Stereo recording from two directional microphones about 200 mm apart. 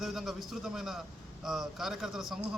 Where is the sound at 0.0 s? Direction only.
Centre (ahead or behind).